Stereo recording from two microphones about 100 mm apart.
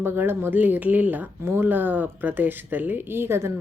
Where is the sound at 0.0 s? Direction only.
25° right (ahead or behind).